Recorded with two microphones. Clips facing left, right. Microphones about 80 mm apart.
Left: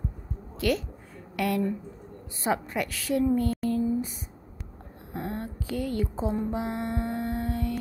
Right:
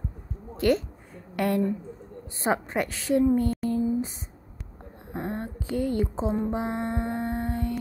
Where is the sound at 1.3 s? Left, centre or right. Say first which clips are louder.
Right 2 dB; right.